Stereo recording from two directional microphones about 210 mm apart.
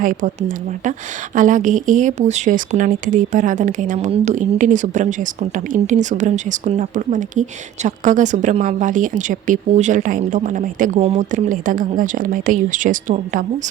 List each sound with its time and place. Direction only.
0.0 s speech: 40° right (ahead or behind)